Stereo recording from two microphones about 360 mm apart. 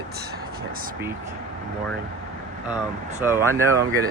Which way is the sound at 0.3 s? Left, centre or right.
Right.